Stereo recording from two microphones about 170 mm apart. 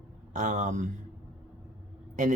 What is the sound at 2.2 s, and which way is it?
Speech, 45° right (ahead or behind).